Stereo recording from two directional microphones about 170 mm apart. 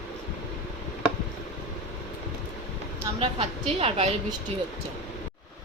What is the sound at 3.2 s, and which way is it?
Speech, 35° right (ahead or behind).